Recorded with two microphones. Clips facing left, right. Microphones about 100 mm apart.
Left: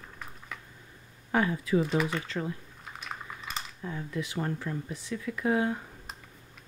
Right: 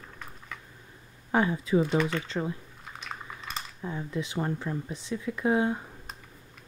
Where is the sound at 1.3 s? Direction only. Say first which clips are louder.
Right 2 dB; 25° right (ahead or behind).